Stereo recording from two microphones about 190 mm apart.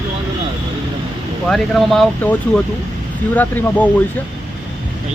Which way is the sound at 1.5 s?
Centre (ahead or behind).